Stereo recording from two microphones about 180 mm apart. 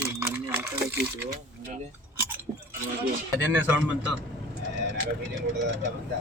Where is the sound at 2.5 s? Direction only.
30° right (ahead or behind).